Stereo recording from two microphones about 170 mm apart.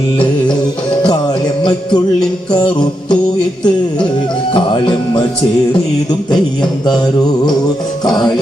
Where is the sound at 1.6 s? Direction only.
25° left (ahead or behind).